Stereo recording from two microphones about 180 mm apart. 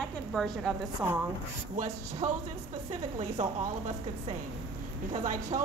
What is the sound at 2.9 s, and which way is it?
Speech, 35° right (ahead or behind).